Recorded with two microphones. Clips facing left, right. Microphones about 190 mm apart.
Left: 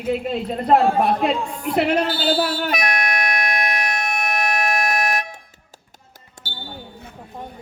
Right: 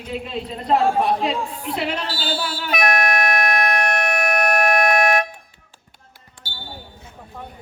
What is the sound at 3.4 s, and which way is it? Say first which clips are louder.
Music: right 4 dB; 55° right (ahead or behind).